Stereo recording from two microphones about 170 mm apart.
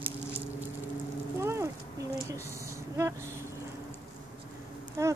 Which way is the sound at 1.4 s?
15° right (ahead or behind).